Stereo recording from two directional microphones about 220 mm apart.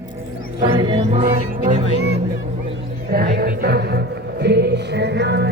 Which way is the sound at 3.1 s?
45° right (ahead or behind).